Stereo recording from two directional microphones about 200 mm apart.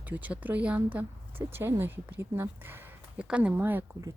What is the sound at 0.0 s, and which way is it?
Speech, 10° right (ahead or behind).